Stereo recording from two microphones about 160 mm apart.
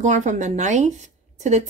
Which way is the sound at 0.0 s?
50° right (ahead or behind).